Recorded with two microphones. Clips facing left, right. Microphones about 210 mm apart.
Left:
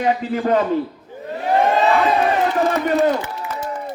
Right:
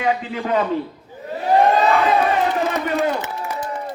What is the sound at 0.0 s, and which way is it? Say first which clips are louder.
Speech: left 3 dB; 40° left (ahead or behind).